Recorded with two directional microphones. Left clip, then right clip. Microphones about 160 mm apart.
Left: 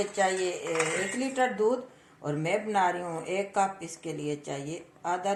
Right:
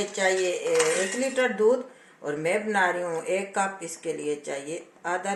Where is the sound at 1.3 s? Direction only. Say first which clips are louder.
Right 4 dB; 65° left (ahead or behind).